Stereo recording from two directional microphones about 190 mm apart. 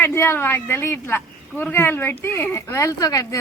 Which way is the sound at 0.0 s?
10° left (ahead or behind).